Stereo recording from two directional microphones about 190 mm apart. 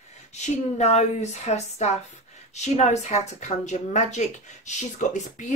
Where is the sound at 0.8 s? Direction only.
35° left (ahead or behind).